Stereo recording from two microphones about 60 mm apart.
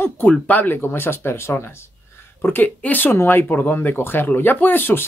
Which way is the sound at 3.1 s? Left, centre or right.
Left.